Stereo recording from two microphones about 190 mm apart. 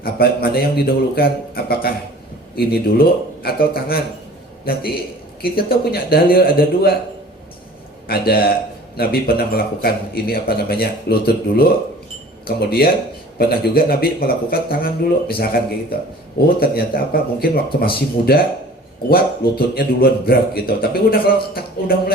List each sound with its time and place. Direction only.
0.0 s a man's voice: 55° left (ahead or behind)
8.0 s a man's voice: 55° left (ahead or behind)